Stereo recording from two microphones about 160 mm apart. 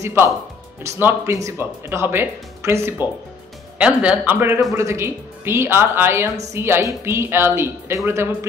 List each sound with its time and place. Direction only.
0.0 s speech: 15° right (ahead or behind)